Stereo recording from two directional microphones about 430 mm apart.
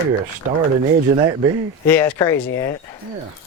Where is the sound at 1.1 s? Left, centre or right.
Centre.